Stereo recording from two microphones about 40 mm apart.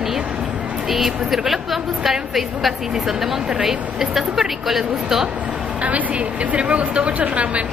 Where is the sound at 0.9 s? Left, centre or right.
Centre.